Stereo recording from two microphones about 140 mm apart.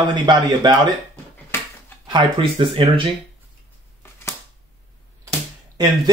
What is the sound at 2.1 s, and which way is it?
Speech, 35° right (ahead or behind).